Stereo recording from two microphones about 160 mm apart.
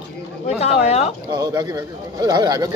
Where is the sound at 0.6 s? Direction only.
40° left (ahead or behind).